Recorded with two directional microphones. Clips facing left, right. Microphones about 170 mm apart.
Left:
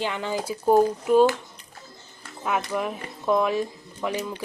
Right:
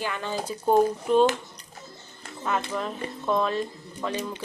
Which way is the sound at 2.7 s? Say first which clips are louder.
Left 2 dB; 10° left (ahead or behind).